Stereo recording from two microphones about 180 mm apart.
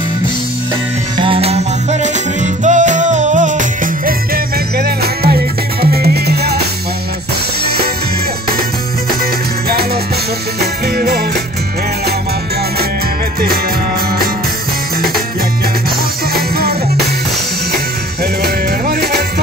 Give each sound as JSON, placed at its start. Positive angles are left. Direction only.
{"t": 1.1, "sound": "music", "side_deg": -30}
{"t": 4.7, "sound": "music", "side_deg": -60}
{"t": 7.6, "sound": "music", "side_deg": -60}
{"t": 10.6, "sound": "music", "side_deg": -60}
{"t": 16.3, "sound": "music", "side_deg": -60}
{"t": 18.4, "sound": "music", "side_deg": -60}